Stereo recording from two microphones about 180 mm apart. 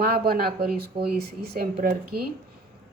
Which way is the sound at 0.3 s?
55° right (ahead or behind).